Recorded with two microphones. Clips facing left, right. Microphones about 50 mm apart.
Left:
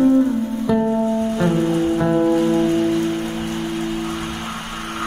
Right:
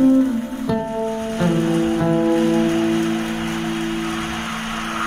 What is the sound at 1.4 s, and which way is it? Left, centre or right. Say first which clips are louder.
Music: right 2 dB; right.